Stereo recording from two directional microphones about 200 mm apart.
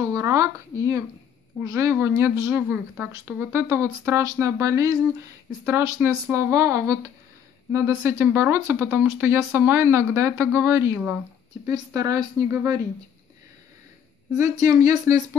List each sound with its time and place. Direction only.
0.1 s speech: 15° right (ahead or behind)
15.1 s speech: 15° right (ahead or behind)